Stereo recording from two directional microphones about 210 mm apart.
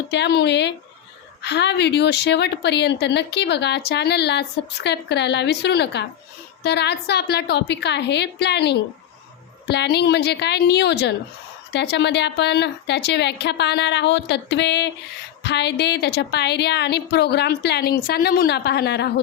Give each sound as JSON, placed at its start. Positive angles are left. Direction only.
{"t": 0.1, "sound": "a woman's voice", "side_deg": 55}